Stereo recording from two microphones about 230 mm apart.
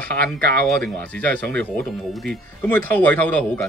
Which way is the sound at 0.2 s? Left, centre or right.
Right.